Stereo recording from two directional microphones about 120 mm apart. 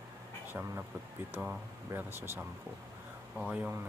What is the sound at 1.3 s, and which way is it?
Speech, 15° right (ahead or behind).